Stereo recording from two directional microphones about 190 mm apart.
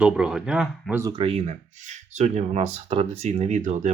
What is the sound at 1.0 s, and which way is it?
Speech, 25° right (ahead or behind).